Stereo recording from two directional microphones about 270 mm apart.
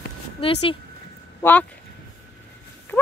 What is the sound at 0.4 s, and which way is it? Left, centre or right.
Speech, left.